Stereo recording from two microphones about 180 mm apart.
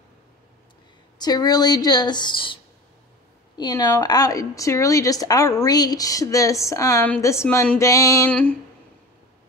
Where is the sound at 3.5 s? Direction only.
20° left (ahead or behind).